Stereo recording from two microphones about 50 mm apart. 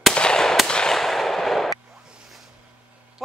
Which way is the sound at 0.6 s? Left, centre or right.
Centre.